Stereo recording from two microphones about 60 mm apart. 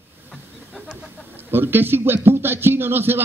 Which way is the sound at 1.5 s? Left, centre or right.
Right.